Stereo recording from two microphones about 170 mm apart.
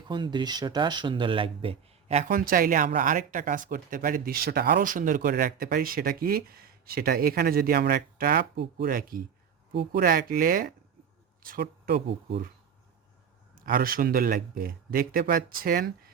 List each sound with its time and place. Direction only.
0.0 s speech: 25° right (ahead or behind); by 12.5 s 80° right
13.6 s speech: 55° right (ahead or behind)